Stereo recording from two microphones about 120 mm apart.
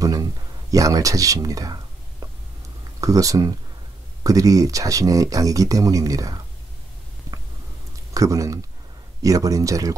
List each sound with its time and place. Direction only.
0.0 s a sound: 30° right (ahead or behind)
3.0 s speech: 30° right (ahead or behind)
8.1 s speech: 30° right (ahead or behind)